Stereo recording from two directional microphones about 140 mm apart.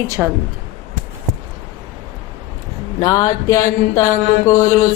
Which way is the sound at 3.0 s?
25° left (ahead or behind).